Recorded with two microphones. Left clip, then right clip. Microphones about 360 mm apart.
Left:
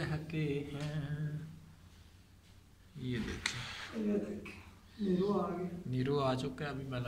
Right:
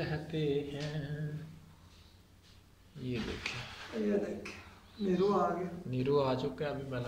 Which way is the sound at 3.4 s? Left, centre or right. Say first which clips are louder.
Left 3 dB; centre.